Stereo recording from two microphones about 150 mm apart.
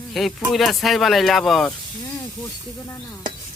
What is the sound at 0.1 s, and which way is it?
Speech, centre (ahead or behind).